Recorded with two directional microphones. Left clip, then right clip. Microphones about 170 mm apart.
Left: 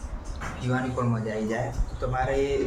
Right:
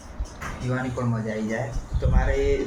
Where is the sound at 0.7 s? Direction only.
Centre (ahead or behind).